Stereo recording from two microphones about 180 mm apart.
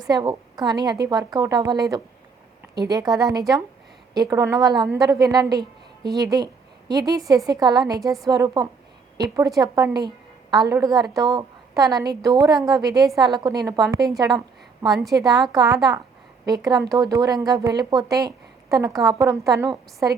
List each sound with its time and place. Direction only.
0.1 s a woman's voice: 25° right (ahead or behind)